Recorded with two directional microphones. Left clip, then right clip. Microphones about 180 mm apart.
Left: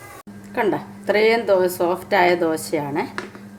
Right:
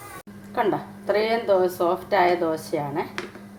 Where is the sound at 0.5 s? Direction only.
25° left (ahead or behind).